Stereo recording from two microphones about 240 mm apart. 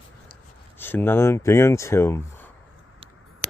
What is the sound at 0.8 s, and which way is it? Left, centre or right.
Speech, centre.